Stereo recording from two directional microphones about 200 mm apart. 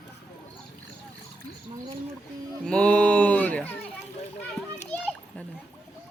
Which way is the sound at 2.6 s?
5° left (ahead or behind).